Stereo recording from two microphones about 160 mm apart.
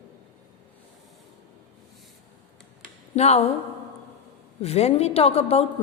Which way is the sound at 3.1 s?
40° left (ahead or behind).